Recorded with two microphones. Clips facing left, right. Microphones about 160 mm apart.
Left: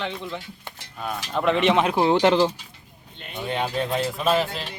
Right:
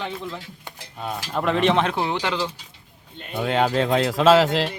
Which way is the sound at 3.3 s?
90° right.